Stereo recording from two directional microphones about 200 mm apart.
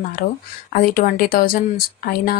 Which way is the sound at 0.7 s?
45° left (ahead or behind).